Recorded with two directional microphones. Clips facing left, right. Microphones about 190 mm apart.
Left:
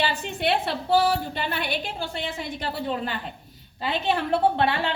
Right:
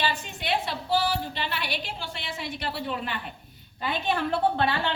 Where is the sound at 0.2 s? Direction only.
60° left (ahead or behind); by 3.2 s 35° left (ahead or behind).